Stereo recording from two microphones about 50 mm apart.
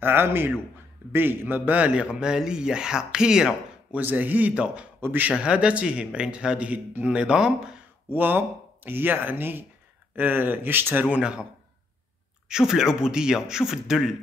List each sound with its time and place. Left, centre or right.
0.0 s speech: right
1.7 s speech: right
3.9 s speech: right
5.0 s speech: right
5.4 s speech: right
8.1 s speech: right
11.1 s speech: right
12.4 s speech: centre